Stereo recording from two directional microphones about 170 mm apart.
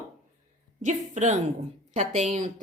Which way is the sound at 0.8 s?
45° right (ahead or behind).